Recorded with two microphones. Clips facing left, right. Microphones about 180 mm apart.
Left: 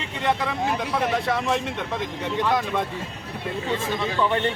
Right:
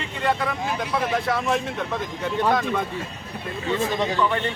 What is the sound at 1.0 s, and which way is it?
Speech, centre (ahead or behind).